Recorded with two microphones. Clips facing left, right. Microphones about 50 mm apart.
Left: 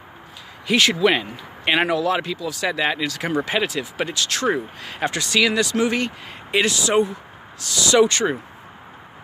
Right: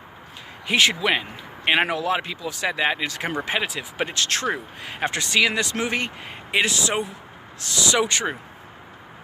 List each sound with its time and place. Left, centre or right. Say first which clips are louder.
0.7 s speech: left 3 dB; right
3.4 s speech: left 3 dB; centre
4.1 s speech: even; right
4.8 s speech: right 2 dB; right
7.9 s speech: left 7 dB; centre